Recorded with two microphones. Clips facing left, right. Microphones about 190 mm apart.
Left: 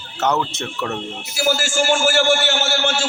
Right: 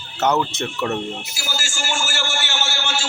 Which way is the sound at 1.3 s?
55° left (ahead or behind).